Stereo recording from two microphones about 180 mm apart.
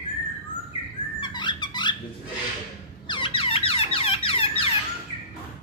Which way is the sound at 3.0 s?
25° left (ahead or behind).